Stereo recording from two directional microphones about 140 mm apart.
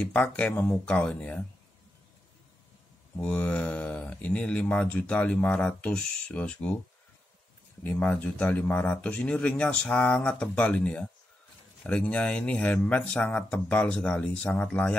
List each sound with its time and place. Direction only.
0.0 s speech: 10° left (ahead or behind)
3.2 s speech: 5° left (ahead or behind)
7.8 s speech: 15° left (ahead or behind)